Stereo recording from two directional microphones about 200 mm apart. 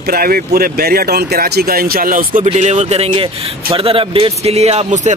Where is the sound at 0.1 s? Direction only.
50° right (ahead or behind).